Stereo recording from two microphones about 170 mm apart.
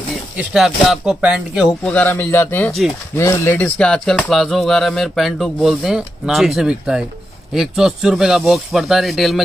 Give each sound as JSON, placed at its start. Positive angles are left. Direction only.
{"t": 0.4, "sound": "speech", "side_deg": -5}
{"t": 2.0, "sound": "speech", "side_deg": 15}